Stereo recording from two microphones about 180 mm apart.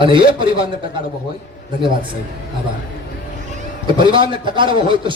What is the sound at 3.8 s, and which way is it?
Speech, 25° right (ahead or behind).